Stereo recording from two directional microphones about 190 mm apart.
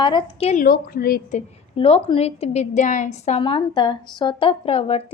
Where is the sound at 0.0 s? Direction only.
25° left (ahead or behind).